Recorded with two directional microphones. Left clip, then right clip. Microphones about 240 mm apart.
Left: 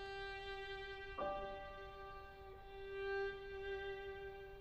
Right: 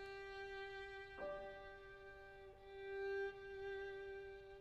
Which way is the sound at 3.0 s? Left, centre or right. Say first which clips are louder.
Left 3 dB; right.